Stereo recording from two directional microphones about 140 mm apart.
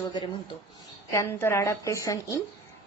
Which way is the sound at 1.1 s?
20° left (ahead or behind).